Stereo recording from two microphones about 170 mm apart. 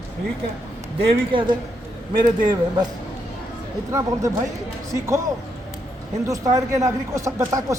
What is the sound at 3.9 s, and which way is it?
A man's voice, 20° right (ahead or behind).